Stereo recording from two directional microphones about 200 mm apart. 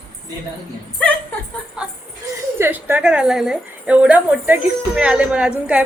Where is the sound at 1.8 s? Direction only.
5° right (ahead or behind).